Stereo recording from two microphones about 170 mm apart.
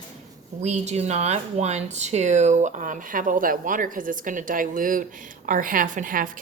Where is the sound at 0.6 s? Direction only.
40° right (ahead or behind).